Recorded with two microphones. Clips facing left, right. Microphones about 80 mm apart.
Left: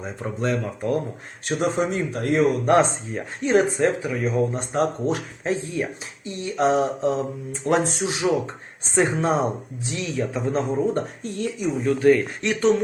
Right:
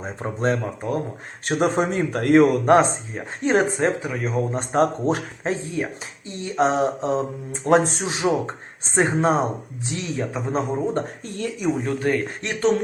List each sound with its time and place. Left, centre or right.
0.0 s speech: right
1.5 s speech: right
3.4 s speech: right
11.2 s speech: right